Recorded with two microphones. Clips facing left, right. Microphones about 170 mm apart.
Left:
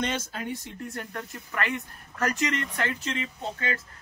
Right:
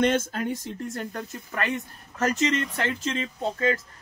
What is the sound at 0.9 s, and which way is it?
Speech, 30° right (ahead or behind).